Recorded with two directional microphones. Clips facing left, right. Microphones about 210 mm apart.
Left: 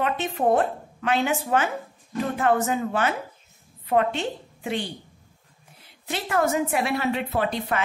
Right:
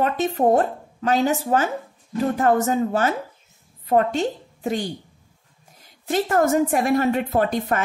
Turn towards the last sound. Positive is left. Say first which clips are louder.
# right 4 dB
turn(degrees=-45)  # may be behind; listen again after turning